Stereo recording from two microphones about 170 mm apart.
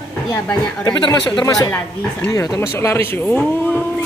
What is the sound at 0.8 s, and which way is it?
Speech, 25° left (ahead or behind).